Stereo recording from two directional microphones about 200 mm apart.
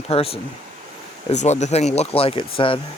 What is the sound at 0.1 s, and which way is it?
Speech, 30° left (ahead or behind).